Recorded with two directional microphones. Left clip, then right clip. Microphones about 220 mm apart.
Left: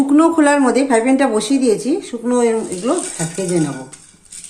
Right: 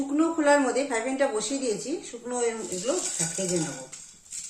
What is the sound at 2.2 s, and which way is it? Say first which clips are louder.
Speech: left 12 dB; 50° left (ahead or behind).